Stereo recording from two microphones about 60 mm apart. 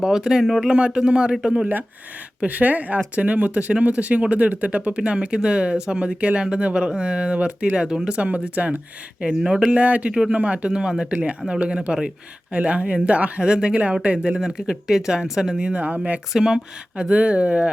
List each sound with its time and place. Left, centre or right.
0.0 s speech: centre
0.7 s speech: centre
2.4 s speech: right
15.8 s speech: right
16.3 s speech: centre
17.0 s speech: right